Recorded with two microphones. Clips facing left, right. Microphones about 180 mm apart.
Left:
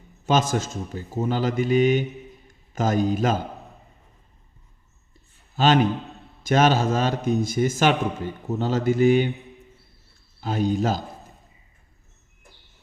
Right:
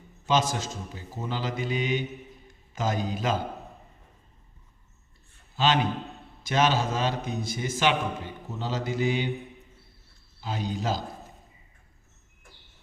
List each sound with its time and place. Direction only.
0.3 s a man's voice: 50° left (ahead or behind)
5.5 s a man's voice: 50° left (ahead or behind)
10.4 s a man's voice: 50° left (ahead or behind)